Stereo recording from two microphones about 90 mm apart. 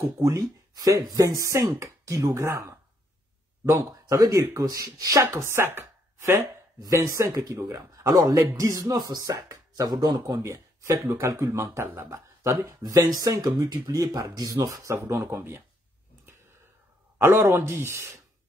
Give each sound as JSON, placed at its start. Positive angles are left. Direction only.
{"t": 0.2, "sound": "a man's voice", "side_deg": -35}
{"t": 12.6, "sound": "speech", "side_deg": -45}
{"t": 15.0, "sound": "speech", "side_deg": -30}
{"t": 17.2, "sound": "speech", "side_deg": -25}